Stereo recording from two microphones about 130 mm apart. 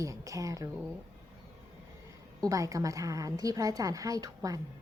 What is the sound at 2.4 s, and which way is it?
A woman's voice, 25° right (ahead or behind).